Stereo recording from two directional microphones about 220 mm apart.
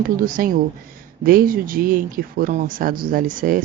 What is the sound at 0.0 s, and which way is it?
Speech, 40° right (ahead or behind).